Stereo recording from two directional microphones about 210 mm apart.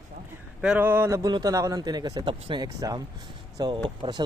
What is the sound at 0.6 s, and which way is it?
A man's voice, 5° right (ahead or behind).